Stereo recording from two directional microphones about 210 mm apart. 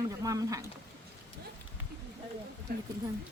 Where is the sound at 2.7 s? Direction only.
45° right (ahead or behind).